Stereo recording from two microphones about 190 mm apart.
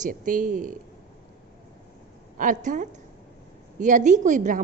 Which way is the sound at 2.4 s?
40° right (ahead or behind).